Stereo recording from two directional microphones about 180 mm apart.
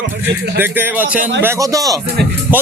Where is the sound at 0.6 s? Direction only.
10° right (ahead or behind).